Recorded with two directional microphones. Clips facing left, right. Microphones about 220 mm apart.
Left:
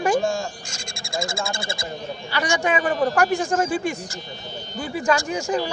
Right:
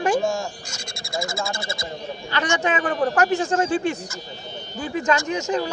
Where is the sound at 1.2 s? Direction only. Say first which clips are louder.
Even; 30° left (ahead or behind).